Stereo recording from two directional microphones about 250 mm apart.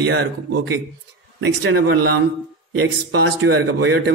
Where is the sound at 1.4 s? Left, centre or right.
Right.